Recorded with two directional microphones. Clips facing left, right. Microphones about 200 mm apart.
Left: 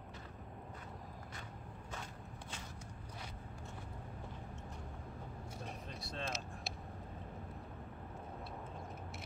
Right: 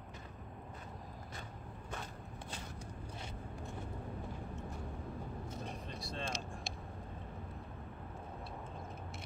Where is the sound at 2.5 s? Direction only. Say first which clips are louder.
Right 5 dB; 30° right (ahead or behind).